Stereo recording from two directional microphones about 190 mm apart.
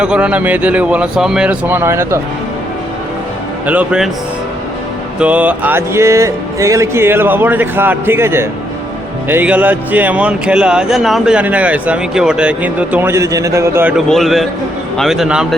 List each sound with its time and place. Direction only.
0.0 s speech: 5° right (ahead or behind)
3.7 s a man's voice: 5° right (ahead or behind)
5.2 s speech: 5° right (ahead or behind)
14.1 s a man's voice: centre (ahead or behind)